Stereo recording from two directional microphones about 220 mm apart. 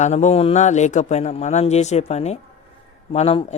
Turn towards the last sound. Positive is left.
turn(degrees=25)  # may be behind; listen again after turning